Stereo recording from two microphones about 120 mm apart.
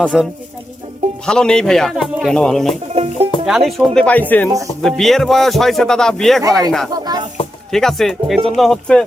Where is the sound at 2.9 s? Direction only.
55° right (ahead or behind).